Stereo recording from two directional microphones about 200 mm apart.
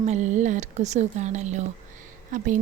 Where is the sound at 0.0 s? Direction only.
35° right (ahead or behind).